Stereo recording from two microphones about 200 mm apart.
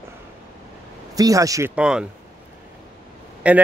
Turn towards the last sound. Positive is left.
turn(degrees=-5)  # may be behind; listen again after turning